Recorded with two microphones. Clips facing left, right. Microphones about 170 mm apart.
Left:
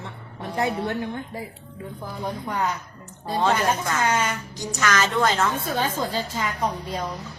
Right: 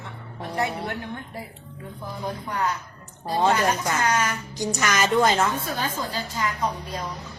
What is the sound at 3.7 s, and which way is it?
Speech, 25° left (ahead or behind).